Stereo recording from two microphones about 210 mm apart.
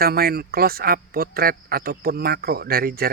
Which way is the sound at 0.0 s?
45° right (ahead or behind).